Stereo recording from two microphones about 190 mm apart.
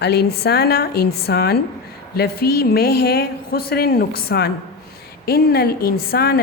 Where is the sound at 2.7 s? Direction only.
55° left (ahead or behind).